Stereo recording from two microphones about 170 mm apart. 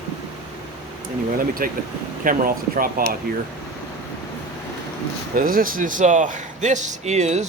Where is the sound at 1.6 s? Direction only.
60° right (ahead or behind).